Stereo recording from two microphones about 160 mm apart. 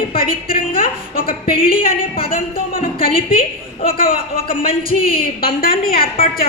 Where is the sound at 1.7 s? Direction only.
65° left (ahead or behind).